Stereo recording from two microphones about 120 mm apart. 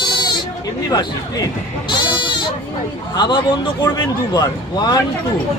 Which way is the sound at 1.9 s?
40° left (ahead or behind).